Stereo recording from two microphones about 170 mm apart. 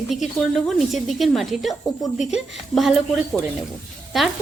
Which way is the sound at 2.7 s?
Centre (ahead or behind).